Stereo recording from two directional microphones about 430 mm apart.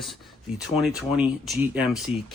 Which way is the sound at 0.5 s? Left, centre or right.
Centre.